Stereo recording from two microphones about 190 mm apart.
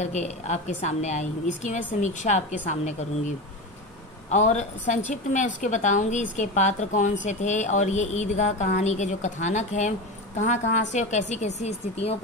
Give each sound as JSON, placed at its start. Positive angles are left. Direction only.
{"t": 0.0, "sound": "a woman's voice", "side_deg": 35}
{"t": 4.3, "sound": "a woman's voice", "side_deg": 35}